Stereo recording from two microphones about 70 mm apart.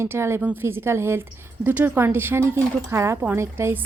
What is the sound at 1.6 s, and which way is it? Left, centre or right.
Speech, right.